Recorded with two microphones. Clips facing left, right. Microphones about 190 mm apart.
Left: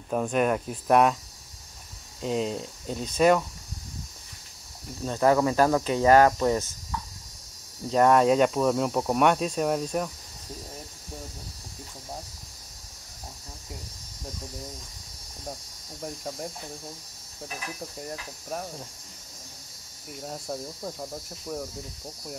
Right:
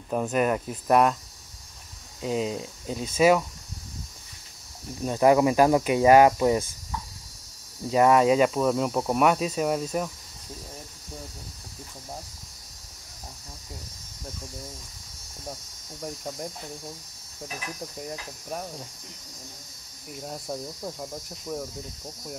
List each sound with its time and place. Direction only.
0.1 s speech: centre (ahead or behind)
2.2 s speech: 5° right (ahead or behind)
5.0 s speech: 15° right (ahead or behind)
7.9 s speech: 5° right (ahead or behind)
16.0 s speech: 5° left (ahead or behind)
20.1 s speech: centre (ahead or behind)